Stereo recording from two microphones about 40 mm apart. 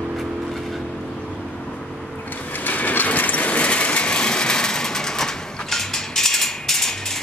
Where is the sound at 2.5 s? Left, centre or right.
Left; by 7.2 s centre.